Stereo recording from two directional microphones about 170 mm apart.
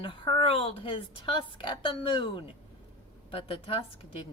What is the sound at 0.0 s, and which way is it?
A woman's voice, 30° left (ahead or behind).